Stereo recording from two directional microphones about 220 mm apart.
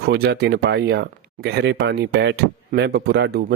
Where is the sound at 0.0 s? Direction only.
45° right (ahead or behind).